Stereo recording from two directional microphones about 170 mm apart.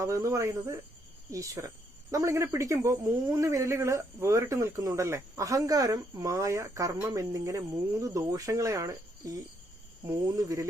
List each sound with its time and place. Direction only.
0.0 s speech: 15° right (ahead or behind)